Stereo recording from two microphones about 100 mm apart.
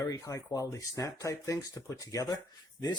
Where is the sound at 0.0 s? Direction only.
35° left (ahead or behind).